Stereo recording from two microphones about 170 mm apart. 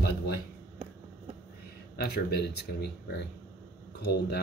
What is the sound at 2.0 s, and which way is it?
Speech, 70° left (ahead or behind).